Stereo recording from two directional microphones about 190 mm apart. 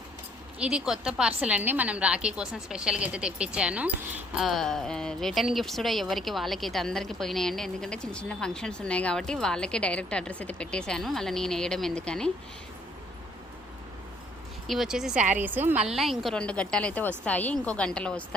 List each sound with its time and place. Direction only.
0.6 s a woman's voice: 5° right (ahead or behind)
14.7 s a woman's voice: centre (ahead or behind)